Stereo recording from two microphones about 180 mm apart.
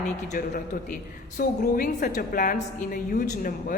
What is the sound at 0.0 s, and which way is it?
A woman's voice, 45° left (ahead or behind).